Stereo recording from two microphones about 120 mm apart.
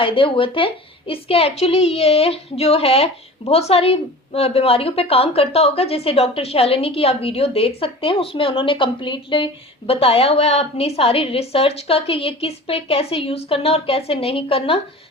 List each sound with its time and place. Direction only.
0.0 s a woman's voice: 45° left (ahead or behind)